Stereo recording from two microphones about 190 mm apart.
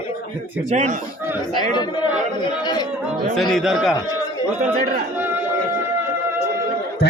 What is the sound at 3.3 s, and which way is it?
Speech, centre (ahead or behind).